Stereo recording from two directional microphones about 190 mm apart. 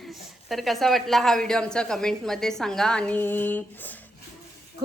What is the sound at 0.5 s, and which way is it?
A woman's voice, centre (ahead or behind).